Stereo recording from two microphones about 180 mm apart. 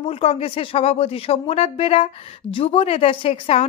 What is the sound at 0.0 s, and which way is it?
Speech, 35° left (ahead or behind).